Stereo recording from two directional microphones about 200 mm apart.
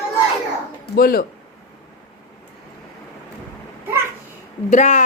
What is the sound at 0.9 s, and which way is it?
Speech, 50° left (ahead or behind).